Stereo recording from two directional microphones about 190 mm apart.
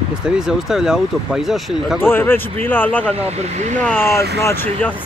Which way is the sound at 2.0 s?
10° left (ahead or behind).